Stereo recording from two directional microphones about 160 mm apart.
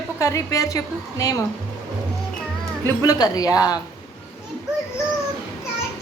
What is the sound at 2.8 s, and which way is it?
Speech, 20° left (ahead or behind).